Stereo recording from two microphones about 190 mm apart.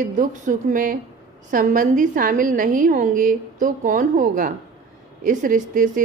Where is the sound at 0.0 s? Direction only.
45° right (ahead or behind).